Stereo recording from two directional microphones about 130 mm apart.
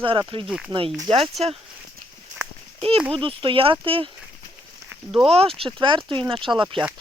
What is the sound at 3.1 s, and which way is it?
Speech, 45° right (ahead or behind).